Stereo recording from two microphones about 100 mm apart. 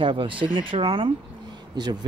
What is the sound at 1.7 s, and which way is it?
Speech, 45° right (ahead or behind).